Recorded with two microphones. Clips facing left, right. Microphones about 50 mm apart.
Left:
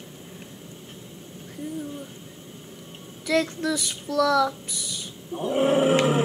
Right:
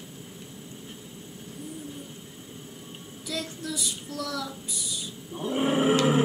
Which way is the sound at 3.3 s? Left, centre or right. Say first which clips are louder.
Left 10 dB; left.